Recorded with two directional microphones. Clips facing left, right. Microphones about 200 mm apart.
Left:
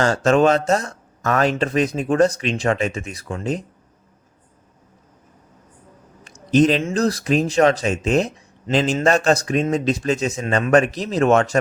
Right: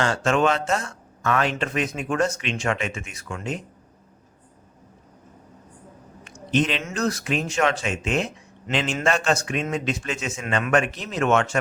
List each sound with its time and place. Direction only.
0.0 s speech: 40° left (ahead or behind)
6.2 s speech: 40° left (ahead or behind)